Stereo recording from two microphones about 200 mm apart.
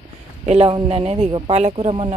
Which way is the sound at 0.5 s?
30° right (ahead or behind).